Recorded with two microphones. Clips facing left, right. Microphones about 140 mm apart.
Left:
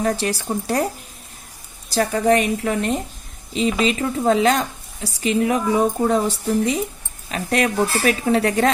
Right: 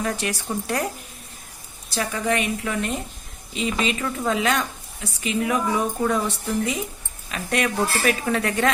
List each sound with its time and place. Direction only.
0.0 s a woman's voice: 35° left (ahead or behind)
1.9 s a woman's voice: 40° left (ahead or behind)